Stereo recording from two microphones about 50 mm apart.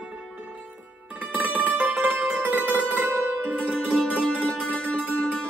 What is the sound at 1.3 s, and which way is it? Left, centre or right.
Music, right.